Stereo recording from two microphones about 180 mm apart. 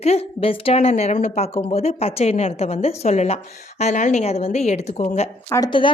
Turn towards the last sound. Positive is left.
turn(degrees=25)  # may be behind; listen again after turning